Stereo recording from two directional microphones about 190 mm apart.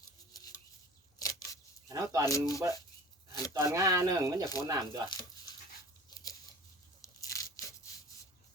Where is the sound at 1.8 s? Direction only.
15° right (ahead or behind).